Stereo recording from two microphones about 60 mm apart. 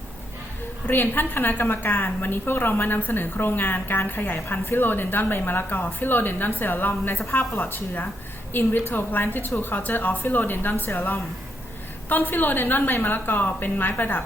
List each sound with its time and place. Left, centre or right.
0.9 s a woman's voice: left
12.0 s a woman's voice: left